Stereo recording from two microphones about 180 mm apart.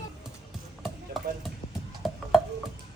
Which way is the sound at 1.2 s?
Centre (ahead or behind).